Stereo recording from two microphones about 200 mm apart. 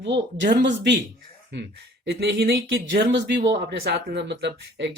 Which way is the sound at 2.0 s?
65° right (ahead or behind).